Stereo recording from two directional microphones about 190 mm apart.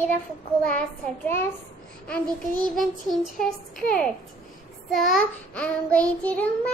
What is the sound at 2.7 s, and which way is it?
Child singing, centre (ahead or behind).